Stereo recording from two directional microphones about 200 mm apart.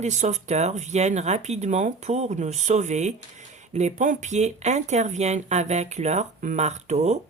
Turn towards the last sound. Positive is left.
turn(degrees=-35)  # may be behind; listen again after turning